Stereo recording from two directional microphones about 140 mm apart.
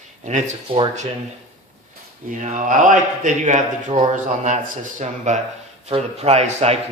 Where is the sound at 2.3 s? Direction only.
60° right (ahead or behind).